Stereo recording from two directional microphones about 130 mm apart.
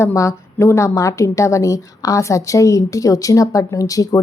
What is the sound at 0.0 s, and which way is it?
A woman's voice, 25° left (ahead or behind).